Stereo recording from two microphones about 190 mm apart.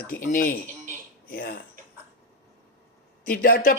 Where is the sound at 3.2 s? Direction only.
45° left (ahead or behind).